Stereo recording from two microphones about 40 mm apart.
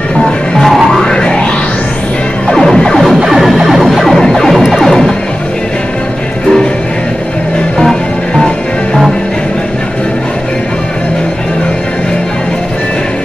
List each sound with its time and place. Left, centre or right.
0.9 s music: centre
2.5 s music: centre
3.3 s music: centre